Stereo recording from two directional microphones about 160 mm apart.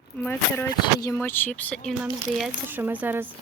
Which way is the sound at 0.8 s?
25° left (ahead or behind).